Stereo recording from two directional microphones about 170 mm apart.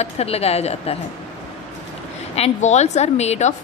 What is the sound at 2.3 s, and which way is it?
A woman's voice, 40° left (ahead or behind).